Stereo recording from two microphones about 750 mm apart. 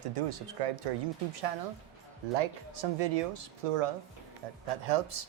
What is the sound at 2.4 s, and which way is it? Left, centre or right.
Speech, right.